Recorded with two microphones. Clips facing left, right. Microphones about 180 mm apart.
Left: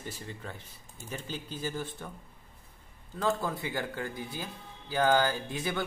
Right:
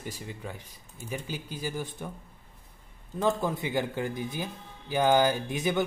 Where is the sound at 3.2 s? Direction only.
20° right (ahead or behind).